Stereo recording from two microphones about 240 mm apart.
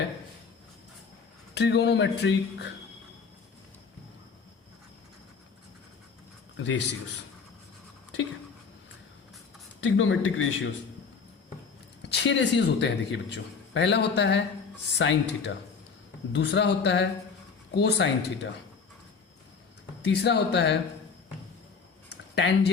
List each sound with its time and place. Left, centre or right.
1.5 s a man's voice: left
6.6 s a man's voice: left
9.8 s a man's voice: left
12.0 s a man's voice: left
20.1 s a man's voice: left
22.4 s a man's voice: left